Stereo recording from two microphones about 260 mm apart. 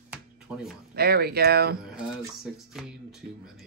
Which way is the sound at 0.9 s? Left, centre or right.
Right.